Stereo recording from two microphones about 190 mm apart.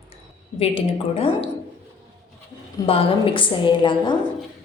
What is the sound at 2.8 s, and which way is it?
Speech, 30° left (ahead or behind).